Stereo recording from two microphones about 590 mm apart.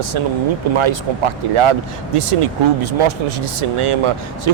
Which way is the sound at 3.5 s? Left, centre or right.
Right.